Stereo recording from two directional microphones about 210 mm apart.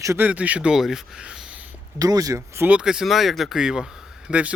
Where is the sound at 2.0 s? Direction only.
15° right (ahead or behind).